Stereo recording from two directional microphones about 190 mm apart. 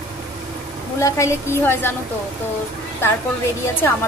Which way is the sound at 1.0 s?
15° left (ahead or behind).